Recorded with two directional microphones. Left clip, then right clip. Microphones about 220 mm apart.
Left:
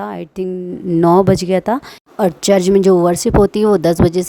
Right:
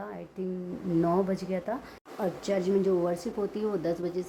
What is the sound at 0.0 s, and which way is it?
A woman's voice, 45° left (ahead or behind).